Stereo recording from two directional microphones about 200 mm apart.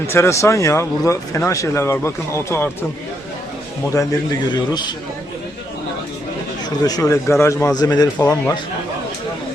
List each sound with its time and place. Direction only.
0.1 s a man's voice: 15° left (ahead or behind)
3.9 s a man's voice: 15° left (ahead or behind)
6.8 s a man's voice: 20° left (ahead or behind)